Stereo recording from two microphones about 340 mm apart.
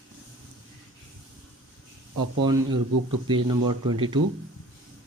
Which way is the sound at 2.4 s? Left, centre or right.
Centre.